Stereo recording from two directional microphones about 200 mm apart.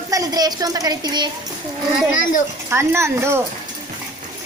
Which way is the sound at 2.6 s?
15° right (ahead or behind).